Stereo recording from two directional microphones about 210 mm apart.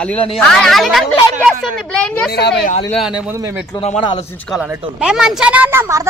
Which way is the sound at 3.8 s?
30° left (ahead or behind).